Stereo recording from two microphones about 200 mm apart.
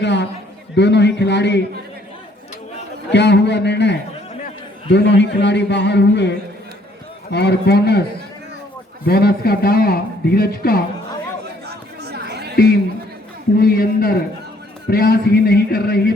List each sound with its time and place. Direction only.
0.0 s a man's voice: 60° left (ahead or behind)
3.1 s a man's voice: 60° left (ahead or behind)
9.0 s a man's voice: 50° left (ahead or behind)
12.0 s chatter: 55° right (ahead or behind)
12.5 s a man's voice: 50° left (ahead or behind)